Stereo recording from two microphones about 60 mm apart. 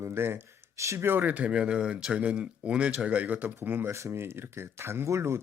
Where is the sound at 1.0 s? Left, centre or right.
Right.